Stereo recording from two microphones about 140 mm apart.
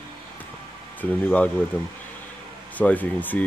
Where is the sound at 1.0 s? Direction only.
10° left (ahead or behind).